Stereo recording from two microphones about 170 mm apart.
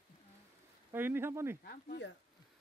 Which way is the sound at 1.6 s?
70° left (ahead or behind).